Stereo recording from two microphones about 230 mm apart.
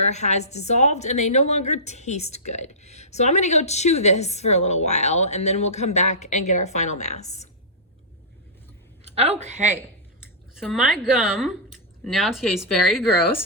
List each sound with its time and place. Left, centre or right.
0.0 s a woman's voice: left
9.0 s a woman's voice: right
10.2 s speech: centre